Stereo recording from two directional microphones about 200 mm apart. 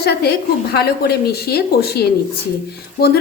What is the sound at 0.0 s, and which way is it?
A woman's voice, 50° left (ahead or behind).